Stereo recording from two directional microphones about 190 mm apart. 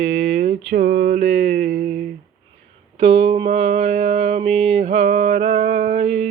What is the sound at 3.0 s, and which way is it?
Mantra, 30° right (ahead or behind).